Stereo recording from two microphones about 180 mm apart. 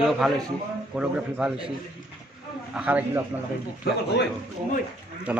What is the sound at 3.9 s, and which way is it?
Speech, 60° left (ahead or behind).